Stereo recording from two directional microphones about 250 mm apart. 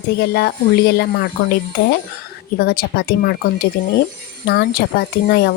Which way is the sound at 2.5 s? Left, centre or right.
Left.